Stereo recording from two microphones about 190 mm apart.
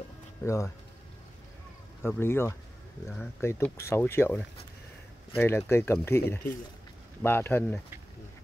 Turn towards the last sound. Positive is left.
turn(degrees=10)  # may be behind; listen again after turning